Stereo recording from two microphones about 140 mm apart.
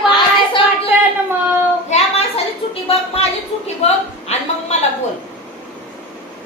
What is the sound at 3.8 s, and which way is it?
Speech, 45° left (ahead or behind).